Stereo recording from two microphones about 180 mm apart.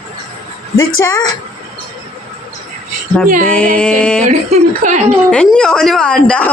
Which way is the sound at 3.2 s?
50° right (ahead or behind).